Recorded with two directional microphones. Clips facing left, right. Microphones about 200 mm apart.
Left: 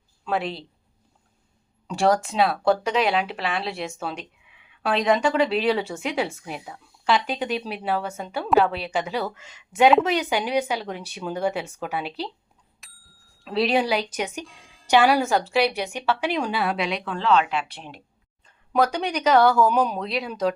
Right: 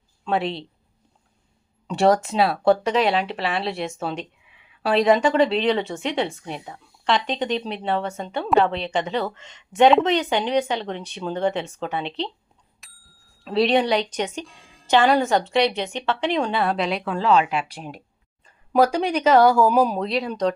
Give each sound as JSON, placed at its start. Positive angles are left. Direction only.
{"t": 0.3, "sound": "speech", "side_deg": 0}
{"t": 1.9, "sound": "speech", "side_deg": 0}
{"t": 12.8, "sound": "bicycle bell", "side_deg": 0}
{"t": 14.8, "sound": "speech", "side_deg": 10}
{"t": 18.4, "sound": "a sound", "side_deg": -5}
{"t": 19.2, "sound": "speech", "side_deg": -5}